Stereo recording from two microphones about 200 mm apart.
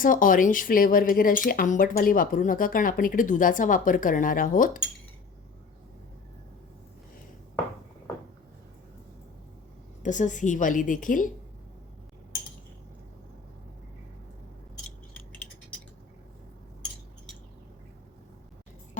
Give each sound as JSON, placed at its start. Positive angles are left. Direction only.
{"t": 0.0, "sound": "speech", "side_deg": 40}
{"t": 10.0, "sound": "a woman's voice", "side_deg": 40}
{"t": 14.8, "sound": "a sound", "side_deg": 5}